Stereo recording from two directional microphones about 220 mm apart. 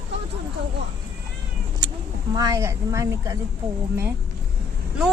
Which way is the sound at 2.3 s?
15° right (ahead or behind).